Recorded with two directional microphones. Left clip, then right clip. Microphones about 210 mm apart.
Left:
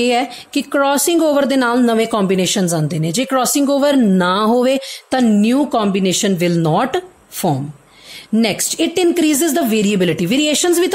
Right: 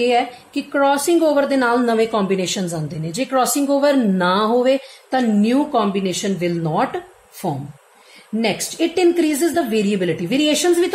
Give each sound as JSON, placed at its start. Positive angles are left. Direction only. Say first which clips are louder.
{"t": 0.0, "sound": "a woman's voice", "louder": "left 1 dB", "side_deg": 50}